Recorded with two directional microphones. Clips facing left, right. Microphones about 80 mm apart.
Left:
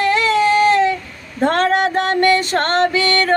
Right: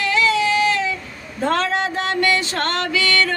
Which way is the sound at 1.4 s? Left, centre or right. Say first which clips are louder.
Left 5 dB; left.